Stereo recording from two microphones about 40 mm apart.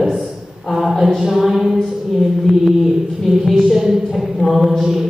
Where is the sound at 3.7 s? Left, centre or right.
Centre.